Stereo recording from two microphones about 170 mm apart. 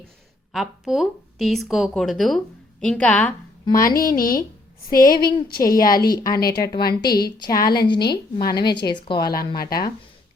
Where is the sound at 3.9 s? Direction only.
55° left (ahead or behind).